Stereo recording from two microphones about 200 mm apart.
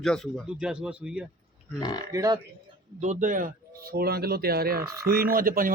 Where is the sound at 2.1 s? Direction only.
20° right (ahead or behind).